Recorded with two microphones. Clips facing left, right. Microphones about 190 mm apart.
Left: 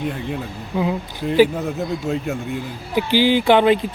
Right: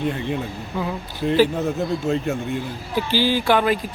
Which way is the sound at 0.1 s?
5° left (ahead or behind).